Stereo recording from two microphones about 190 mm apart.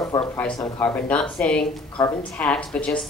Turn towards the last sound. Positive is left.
turn(degrees=5)  # may be behind; listen again after turning